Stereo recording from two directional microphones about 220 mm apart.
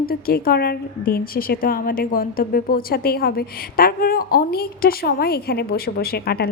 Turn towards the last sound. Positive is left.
turn(degrees=45)  # may be behind; listen again after turning